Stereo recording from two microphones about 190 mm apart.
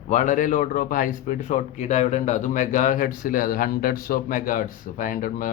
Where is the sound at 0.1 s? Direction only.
40° left (ahead or behind).